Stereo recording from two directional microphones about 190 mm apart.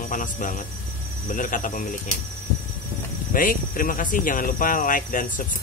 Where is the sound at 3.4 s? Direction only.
45° left (ahead or behind).